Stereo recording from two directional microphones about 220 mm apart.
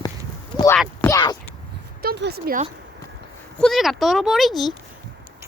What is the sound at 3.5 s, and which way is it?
Speech, centre (ahead or behind).